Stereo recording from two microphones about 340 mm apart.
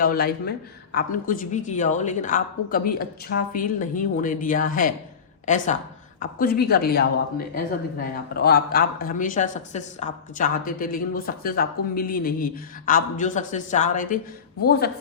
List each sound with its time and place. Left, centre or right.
0.0 s speech: left
6.1 s speech: left